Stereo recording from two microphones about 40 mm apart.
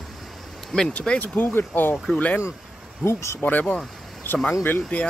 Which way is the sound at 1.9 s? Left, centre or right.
Centre.